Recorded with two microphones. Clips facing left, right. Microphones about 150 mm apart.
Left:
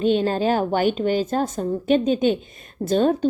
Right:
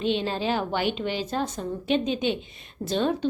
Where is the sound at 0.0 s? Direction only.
45° left (ahead or behind).